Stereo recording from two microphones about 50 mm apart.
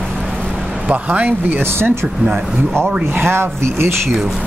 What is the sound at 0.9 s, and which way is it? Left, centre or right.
Speech, right.